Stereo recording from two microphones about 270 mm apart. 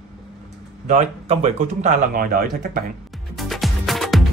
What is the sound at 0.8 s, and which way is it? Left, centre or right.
Speech, right.